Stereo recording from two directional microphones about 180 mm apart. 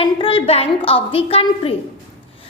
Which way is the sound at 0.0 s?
30° left (ahead or behind).